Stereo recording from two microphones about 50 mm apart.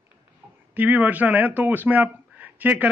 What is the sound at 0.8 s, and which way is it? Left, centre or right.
Speech, right.